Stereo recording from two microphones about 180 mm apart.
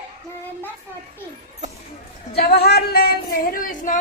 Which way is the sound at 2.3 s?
60° left (ahead or behind).